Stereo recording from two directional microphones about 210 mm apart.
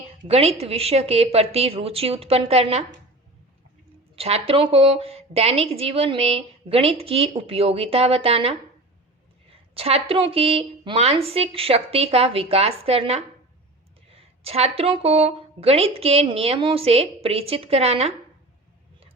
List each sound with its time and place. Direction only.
0.3 s a woman's voice: 30° right (ahead or behind)
4.1 s a woman's voice: 30° right (ahead or behind)
9.7 s a woman's voice: 30° right (ahead or behind)